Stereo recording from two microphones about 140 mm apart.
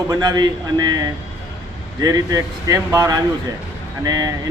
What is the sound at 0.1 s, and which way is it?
Speech, 30° right (ahead or behind).